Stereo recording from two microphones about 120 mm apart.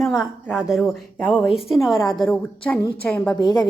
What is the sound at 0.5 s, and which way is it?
A woman's voice, centre (ahead or behind).